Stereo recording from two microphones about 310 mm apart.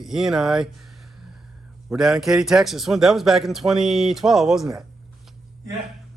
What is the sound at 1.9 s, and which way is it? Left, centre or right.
Speech, centre.